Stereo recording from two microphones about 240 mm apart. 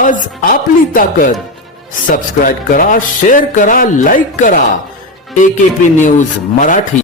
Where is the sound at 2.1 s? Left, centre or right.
Left.